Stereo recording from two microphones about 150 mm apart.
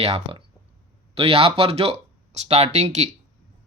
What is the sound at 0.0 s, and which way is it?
Speech, 40° right (ahead or behind).